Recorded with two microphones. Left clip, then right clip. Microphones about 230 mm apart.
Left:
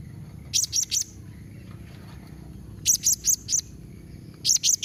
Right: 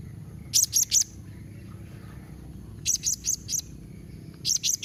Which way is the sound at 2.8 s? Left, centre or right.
Left.